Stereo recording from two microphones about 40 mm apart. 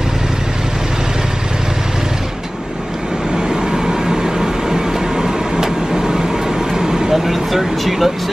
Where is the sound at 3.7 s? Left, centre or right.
Centre.